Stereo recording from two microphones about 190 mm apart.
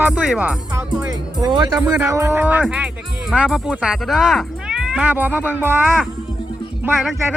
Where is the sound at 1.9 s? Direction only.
10° right (ahead or behind).